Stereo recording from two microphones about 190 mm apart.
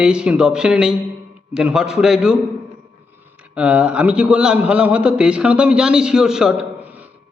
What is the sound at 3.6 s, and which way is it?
A man's voice, 5° right (ahead or behind).